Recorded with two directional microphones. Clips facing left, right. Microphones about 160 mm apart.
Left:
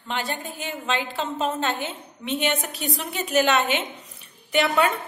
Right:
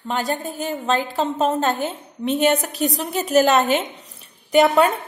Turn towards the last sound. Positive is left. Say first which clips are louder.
# right 7 dB
turn(degrees=-40)  # may be behind; listen again after turning